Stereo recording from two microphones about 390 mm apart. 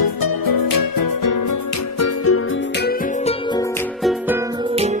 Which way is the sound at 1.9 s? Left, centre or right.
Left.